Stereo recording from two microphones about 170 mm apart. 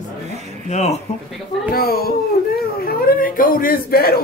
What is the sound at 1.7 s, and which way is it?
A child's voice, 60° left (ahead or behind).